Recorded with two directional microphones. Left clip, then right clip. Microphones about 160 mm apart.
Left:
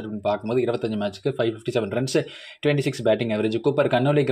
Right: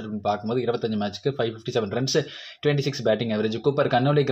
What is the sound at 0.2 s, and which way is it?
Speech, 35° left (ahead or behind).